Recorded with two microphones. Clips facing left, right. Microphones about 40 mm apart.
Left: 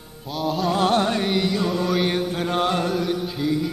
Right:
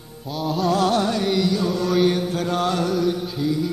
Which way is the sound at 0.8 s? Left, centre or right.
Left.